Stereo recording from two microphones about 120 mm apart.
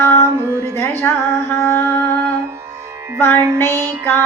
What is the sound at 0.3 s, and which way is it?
Music, 20° right (ahead or behind).